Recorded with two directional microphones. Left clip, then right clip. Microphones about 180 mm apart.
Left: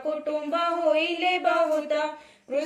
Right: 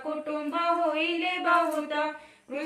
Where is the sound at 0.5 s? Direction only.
40° left (ahead or behind).